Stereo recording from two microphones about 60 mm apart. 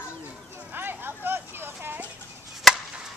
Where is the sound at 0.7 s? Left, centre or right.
Right.